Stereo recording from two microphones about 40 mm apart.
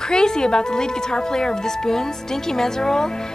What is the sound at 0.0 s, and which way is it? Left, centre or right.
A woman's voice, centre.